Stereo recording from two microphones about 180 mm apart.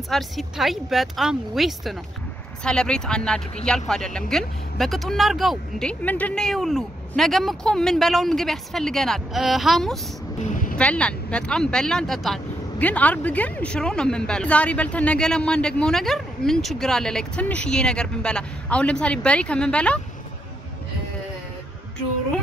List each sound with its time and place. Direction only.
0.1 s speech: centre (ahead or behind)
10.4 s a sound: 45° left (ahead or behind)
10.8 s speech: 5° left (ahead or behind)